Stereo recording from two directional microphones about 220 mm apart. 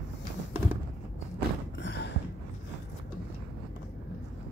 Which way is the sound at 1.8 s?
50° left (ahead or behind).